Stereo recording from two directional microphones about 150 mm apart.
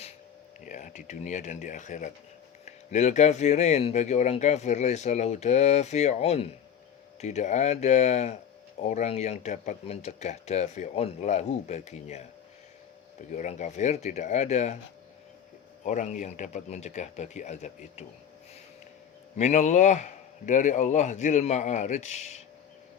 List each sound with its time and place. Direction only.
0.6 s speech: 60° left (ahead or behind)
13.3 s speech: 50° left (ahead or behind)
15.8 s speech: 55° left (ahead or behind)
19.4 s speech: 50° left (ahead or behind)